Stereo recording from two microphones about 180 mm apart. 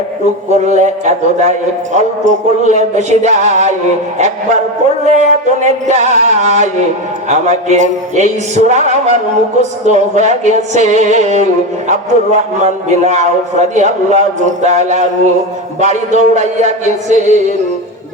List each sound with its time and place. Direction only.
0.5 s a man's voice: 40° right (ahead or behind)
5.0 s a man's voice: 40° right (ahead or behind)
16.8 s music: 40° left (ahead or behind)